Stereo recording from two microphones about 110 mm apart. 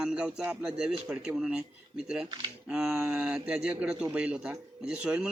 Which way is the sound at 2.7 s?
10° right (ahead or behind).